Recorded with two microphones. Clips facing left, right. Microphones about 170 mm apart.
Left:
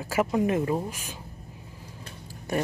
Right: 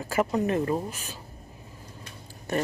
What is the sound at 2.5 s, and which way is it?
Speech, 10° left (ahead or behind).